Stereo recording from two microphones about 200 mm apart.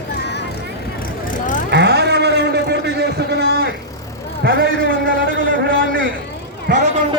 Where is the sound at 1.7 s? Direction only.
55° right (ahead or behind).